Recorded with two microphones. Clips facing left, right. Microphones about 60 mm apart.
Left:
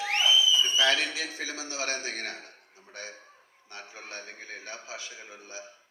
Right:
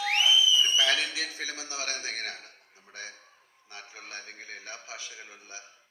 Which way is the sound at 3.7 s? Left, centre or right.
Left.